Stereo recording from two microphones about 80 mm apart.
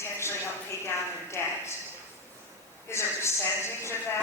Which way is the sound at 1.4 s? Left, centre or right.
Left.